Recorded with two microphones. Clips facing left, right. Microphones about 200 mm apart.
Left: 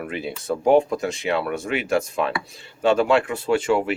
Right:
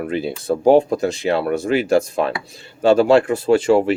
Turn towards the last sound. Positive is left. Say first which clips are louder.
# right 6 dB
turn(degrees=-35)  # may be behind; listen again after turning